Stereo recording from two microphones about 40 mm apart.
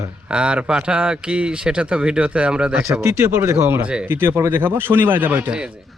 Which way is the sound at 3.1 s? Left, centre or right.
Right.